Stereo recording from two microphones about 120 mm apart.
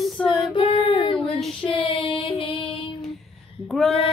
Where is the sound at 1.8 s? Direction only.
45° left (ahead or behind).